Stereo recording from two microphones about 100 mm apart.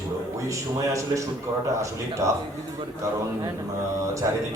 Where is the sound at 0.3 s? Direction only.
35° right (ahead or behind).